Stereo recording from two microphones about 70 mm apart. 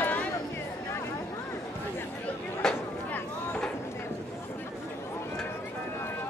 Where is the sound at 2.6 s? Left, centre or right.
Centre.